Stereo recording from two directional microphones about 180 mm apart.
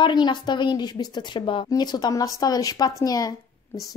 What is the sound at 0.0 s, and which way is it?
Speech, 25° left (ahead or behind).